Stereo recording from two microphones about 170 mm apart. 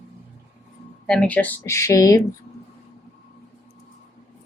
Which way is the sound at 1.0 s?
5° left (ahead or behind).